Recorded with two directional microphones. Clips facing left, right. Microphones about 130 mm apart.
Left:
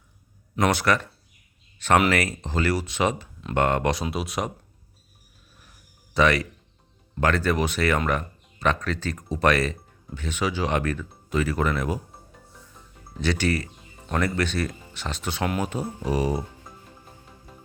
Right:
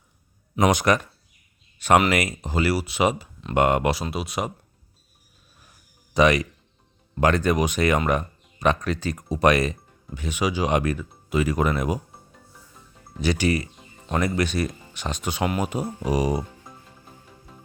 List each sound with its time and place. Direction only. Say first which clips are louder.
0.5 s speech: right 2 dB; 15° right (ahead or behind)
2.0 s speech: even; 15° right (ahead or behind)
6.1 s speech: right 2 dB; 15° right (ahead or behind)
13.1 s speech: right 2 dB; 10° right (ahead or behind)